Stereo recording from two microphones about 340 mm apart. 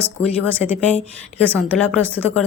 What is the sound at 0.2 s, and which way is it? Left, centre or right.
Speech, centre.